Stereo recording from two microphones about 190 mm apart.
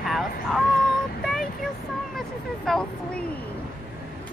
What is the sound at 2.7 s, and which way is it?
Speech, 5° left (ahead or behind).